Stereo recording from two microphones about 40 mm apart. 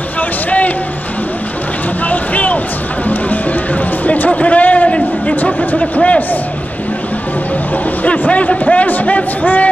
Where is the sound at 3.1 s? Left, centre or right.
Left.